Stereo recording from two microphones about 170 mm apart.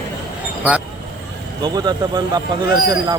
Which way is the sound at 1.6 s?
25° right (ahead or behind).